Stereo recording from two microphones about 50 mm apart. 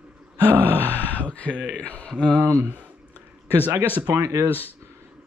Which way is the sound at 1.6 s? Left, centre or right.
Left.